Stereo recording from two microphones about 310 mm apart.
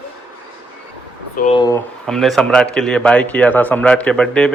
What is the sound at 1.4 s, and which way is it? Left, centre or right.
Speech, centre.